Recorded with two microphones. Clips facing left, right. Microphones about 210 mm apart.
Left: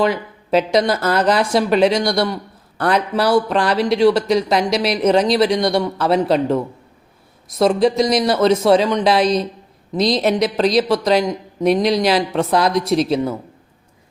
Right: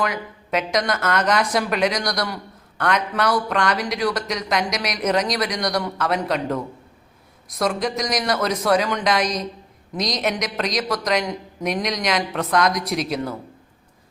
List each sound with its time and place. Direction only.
0.0 s speech: 30° left (ahead or behind)
7.6 s speech: 30° left (ahead or behind)